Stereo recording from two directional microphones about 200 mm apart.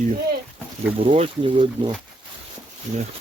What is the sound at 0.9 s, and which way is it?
Speech, 30° right (ahead or behind).